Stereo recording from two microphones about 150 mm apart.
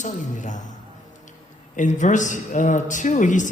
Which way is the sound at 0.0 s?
55° left (ahead or behind).